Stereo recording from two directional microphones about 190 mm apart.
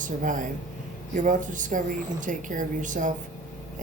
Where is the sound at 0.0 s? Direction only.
45° right (ahead or behind).